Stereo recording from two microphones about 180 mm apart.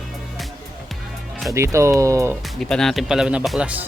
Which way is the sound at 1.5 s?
15° right (ahead or behind).